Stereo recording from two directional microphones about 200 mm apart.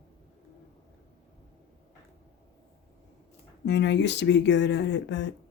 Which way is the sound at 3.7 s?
60° left (ahead or behind).